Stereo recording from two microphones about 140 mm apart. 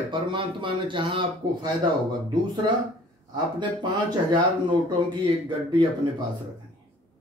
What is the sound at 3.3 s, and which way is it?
Speech, 35° right (ahead or behind).